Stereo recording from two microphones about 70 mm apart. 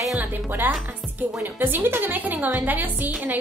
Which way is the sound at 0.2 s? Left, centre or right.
Right.